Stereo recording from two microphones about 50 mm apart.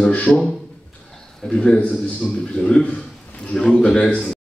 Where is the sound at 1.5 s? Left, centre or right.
Centre.